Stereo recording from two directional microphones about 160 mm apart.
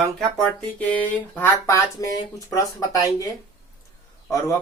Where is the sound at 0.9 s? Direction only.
15° left (ahead or behind).